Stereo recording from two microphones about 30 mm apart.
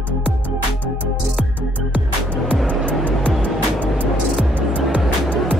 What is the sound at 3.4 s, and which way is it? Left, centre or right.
Music, left.